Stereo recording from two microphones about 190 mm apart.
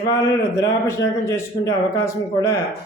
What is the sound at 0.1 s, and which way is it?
Speech, 15° left (ahead or behind).